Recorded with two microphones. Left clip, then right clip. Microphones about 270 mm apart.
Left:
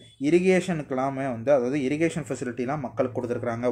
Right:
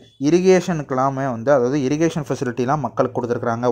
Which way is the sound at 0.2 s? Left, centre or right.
Right.